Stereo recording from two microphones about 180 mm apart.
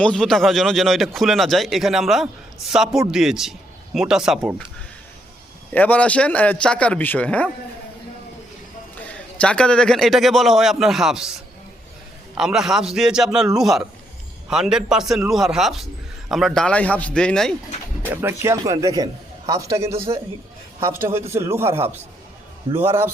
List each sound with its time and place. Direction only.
0.0 s speech: 5° left (ahead or behind)
5.7 s a man's voice: 10° left (ahead or behind)
9.0 s a man's voice: 5° left (ahead or behind)
12.3 s speech: 5° right (ahead or behind)
18.1 s a man's voice: 15° right (ahead or behind)